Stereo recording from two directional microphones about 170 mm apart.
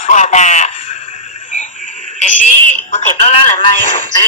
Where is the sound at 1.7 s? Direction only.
50° right (ahead or behind).